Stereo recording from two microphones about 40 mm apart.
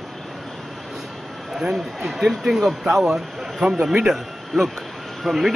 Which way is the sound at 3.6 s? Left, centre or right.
Right.